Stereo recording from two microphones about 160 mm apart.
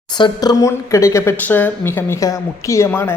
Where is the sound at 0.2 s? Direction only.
20° left (ahead or behind).